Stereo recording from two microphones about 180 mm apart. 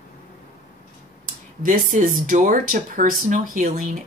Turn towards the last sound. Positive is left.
turn(degrees=-45)  # may be behind; listen again after turning